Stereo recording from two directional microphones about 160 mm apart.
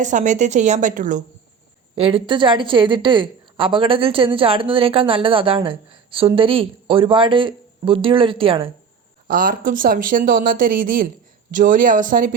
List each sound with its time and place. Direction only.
0.0 s a woman's voice: 50° right (ahead or behind)
2.0 s a woman's voice: 35° right (ahead or behind)
9.2 s speech: 60° right (ahead or behind)